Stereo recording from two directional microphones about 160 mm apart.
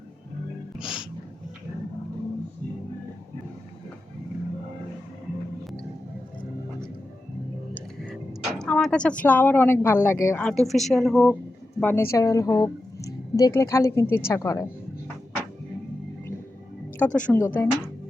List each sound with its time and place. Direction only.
0.8 s music: 5° right (ahead or behind)
7.7 s music: 10° left (ahead or behind)
8.3 s a sound: 5° left (ahead or behind)
9.2 s a woman's voice: 10° left (ahead or behind)
11.8 s a woman's voice: 10° left (ahead or behind)
17.0 s a woman's voice: 10° left (ahead or behind)